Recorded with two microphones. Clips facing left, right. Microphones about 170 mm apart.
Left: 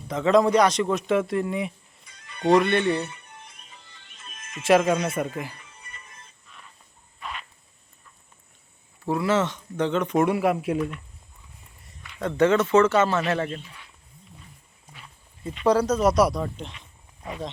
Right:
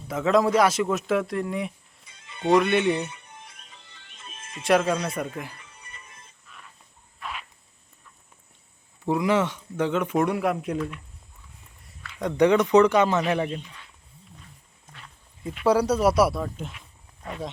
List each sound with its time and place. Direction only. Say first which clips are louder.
0.1 s a man's voice: left 2 dB; 5° right (ahead or behind)
2.0 s music: left 3 dB; 20° right (ahead or behind)
2.5 s a man's voice: left 1 dB; centre (ahead or behind)
2.7 s speech: even; 20° right (ahead or behind)
4.3 s music: left 1 dB; 30° right (ahead or behind)
4.6 s a man's voice: left 2 dB; 5° left (ahead or behind)
6.5 s a sound: right 3 dB; 5° right (ahead or behind)
9.0 s speech: right 1 dB; 15° right (ahead or behind)
10.2 s a man's voice: left 3 dB; 5° left (ahead or behind)
12.0 s a sound: right 3 dB; 15° left (ahead or behind)
12.4 s speech: right 1 dB; 15° right (ahead or behind)
15.4 s a man's voice: even; 10° right (ahead or behind)